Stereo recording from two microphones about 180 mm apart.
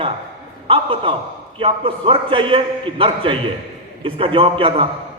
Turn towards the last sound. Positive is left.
turn(degrees=-30)  # may be behind; listen again after turning